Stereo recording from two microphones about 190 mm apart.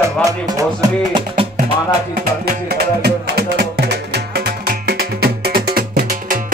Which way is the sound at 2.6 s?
60° right (ahead or behind).